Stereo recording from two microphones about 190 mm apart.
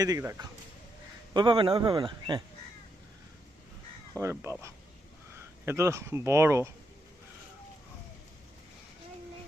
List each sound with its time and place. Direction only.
0.0 s speech: 15° right (ahead or behind)
1.3 s a man's voice: 25° right (ahead or behind)
4.2 s speech: 15° right (ahead or behind)